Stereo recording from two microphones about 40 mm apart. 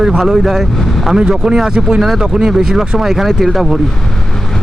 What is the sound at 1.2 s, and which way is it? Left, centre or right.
Speech, right.